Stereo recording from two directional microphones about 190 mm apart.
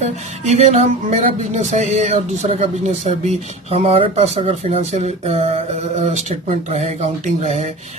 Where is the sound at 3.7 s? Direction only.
30° right (ahead or behind).